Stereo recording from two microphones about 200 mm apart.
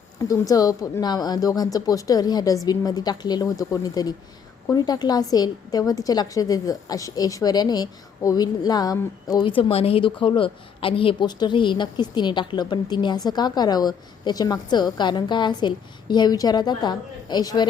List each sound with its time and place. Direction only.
0.2 s a woman's voice: 15° left (ahead or behind)